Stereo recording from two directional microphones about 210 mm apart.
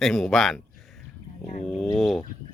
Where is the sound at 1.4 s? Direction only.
30° left (ahead or behind).